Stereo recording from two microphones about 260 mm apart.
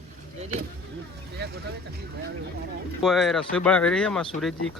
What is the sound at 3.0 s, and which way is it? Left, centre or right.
Speech, centre.